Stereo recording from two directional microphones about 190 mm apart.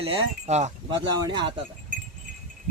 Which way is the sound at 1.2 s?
25° right (ahead or behind).